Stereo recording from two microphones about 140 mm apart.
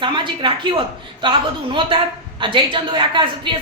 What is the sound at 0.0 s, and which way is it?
A woman's voice, 35° right (ahead or behind).